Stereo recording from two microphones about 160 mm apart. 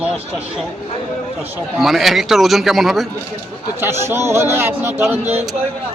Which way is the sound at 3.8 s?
15° right (ahead or behind).